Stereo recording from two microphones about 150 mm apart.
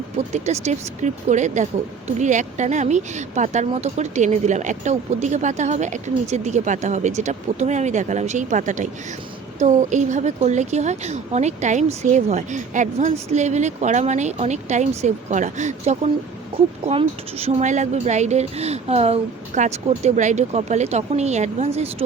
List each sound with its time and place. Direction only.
0.2 s a woman's voice: 50° right (ahead or behind)
16.8 s a woman's voice: 40° right (ahead or behind)